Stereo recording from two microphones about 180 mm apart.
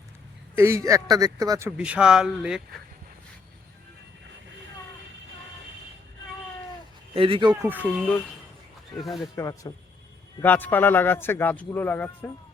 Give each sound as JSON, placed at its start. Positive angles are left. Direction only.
{"t": 0.5, "sound": "speech", "side_deg": -15}
{"t": 7.1, "sound": "a man's voice", "side_deg": -30}
{"t": 7.5, "sound": "speech", "side_deg": -10}
{"t": 9.3, "sound": "a man's voice", "side_deg": 20}